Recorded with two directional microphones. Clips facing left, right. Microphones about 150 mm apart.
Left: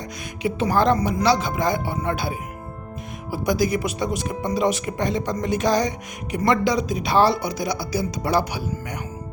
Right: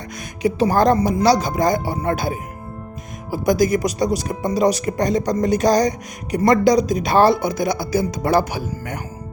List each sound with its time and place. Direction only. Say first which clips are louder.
0.4 s speech: right 4 dB; 40° right (ahead or behind)